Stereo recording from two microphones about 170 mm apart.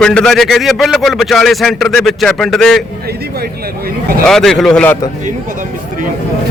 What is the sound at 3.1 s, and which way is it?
Speech, 65° right (ahead or behind).